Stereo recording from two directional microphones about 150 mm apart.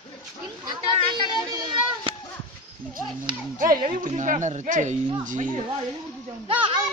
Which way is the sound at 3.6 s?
65° right (ahead or behind).